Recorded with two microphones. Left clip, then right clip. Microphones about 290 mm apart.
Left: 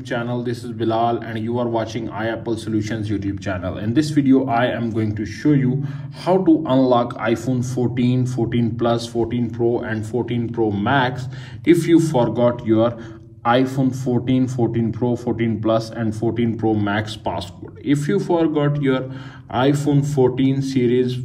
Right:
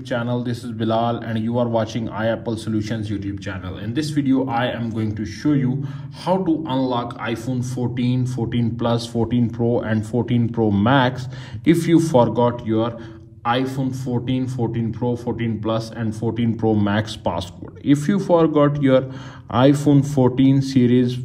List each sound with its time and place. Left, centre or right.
0.1 s a man's voice: right
6.2 s a man's voice: centre